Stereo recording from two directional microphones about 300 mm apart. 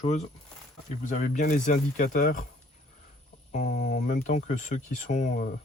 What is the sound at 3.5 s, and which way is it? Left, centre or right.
Speech, left.